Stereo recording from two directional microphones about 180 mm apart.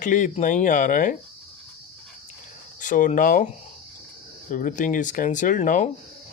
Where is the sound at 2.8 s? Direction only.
45° left (ahead or behind).